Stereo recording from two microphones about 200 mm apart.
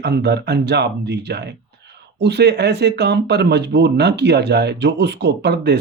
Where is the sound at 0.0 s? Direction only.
55° right (ahead or behind).